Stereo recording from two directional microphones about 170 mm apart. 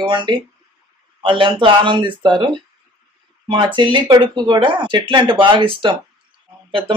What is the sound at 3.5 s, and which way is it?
Speech, 30° right (ahead or behind).